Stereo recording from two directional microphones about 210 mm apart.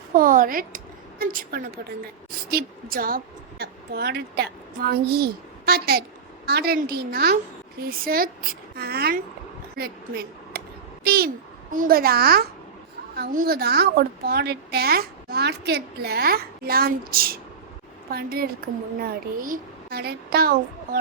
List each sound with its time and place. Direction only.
0.1 s a woman's voice: 40° right (ahead or behind)
11.0 s a sound: 45° right (ahead or behind)
11.7 s a woman's voice: 40° right (ahead or behind)